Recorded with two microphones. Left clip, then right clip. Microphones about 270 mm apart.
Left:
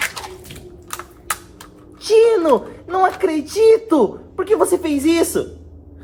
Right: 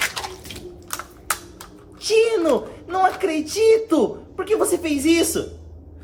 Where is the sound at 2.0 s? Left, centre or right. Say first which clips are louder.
Left 5 dB; centre.